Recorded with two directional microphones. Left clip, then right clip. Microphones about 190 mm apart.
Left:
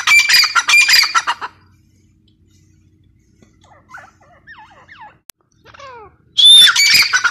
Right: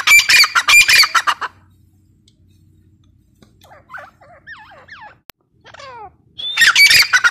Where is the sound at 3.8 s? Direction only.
25° right (ahead or behind).